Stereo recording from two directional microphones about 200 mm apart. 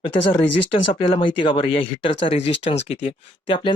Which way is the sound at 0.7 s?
25° left (ahead or behind).